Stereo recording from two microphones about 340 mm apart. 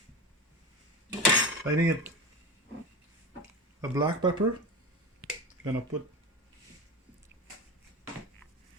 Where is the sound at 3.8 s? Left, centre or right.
Centre.